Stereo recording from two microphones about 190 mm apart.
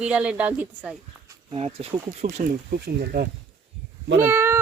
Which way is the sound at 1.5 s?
30° right (ahead or behind).